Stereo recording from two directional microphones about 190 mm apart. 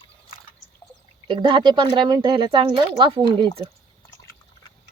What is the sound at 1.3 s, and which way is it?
Speech, 25° right (ahead or behind).